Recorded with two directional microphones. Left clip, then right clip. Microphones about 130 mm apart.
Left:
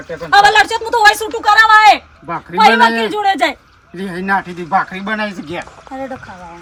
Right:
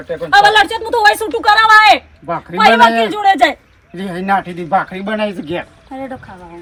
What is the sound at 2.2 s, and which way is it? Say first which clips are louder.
A man's voice: left 1 dB; centre (ahead or behind).